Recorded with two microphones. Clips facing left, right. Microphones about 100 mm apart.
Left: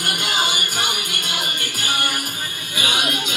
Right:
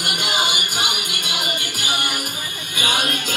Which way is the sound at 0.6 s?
15° right (ahead or behind).